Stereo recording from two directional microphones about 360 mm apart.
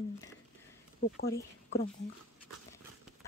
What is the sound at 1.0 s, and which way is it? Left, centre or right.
Speech, left.